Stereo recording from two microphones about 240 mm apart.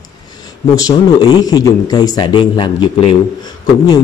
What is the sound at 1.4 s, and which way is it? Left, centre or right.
Speech, centre.